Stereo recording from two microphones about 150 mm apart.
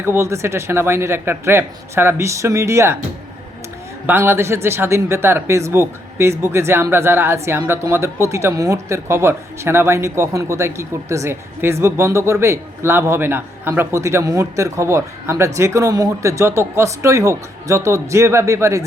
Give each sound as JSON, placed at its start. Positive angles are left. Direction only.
{"t": 0.0, "sound": "speech", "side_deg": -15}
{"t": 4.0, "sound": "speech", "side_deg": -15}